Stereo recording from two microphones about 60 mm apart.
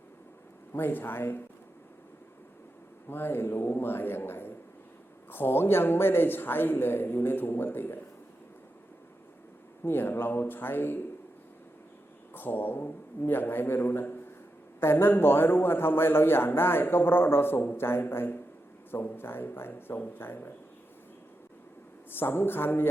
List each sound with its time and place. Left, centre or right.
0.7 s a man's voice: left
3.1 s a man's voice: left
9.8 s a man's voice: left
12.3 s a man's voice: left
22.1 s a man's voice: left